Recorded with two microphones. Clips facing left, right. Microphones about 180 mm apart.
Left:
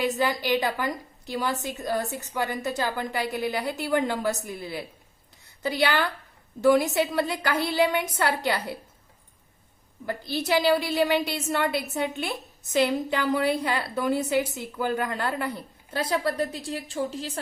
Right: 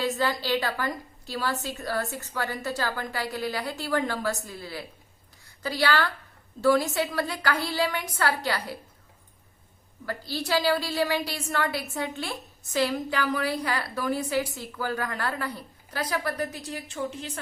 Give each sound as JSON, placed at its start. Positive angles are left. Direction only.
{"t": 0.0, "sound": "a woman's voice", "side_deg": 15}
{"t": 10.1, "sound": "a woman's voice", "side_deg": 20}